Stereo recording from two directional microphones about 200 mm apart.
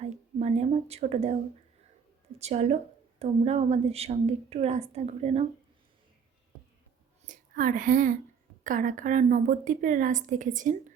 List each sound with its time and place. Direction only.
0.0 s a sound: 35° right (ahead or behind)
2.4 s a woman's voice: 30° right (ahead or behind)
7.3 s a woman's voice: 40° right (ahead or behind)